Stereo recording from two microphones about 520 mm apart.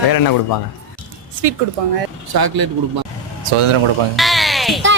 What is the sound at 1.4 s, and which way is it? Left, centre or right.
Speech, right.